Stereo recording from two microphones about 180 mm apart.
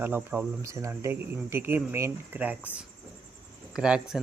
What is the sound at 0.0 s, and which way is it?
Speech, 10° right (ahead or behind).